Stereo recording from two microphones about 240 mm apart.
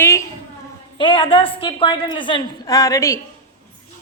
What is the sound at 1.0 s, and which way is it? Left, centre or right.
A woman's voice, centre.